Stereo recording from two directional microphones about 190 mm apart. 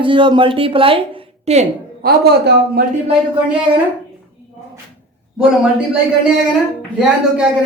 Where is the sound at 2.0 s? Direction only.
55° right (ahead or behind).